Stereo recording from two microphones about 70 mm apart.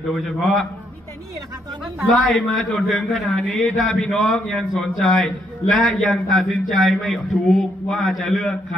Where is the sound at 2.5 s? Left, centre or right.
Centre.